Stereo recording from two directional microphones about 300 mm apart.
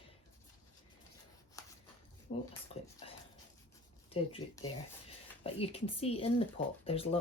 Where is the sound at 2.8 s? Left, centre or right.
Left.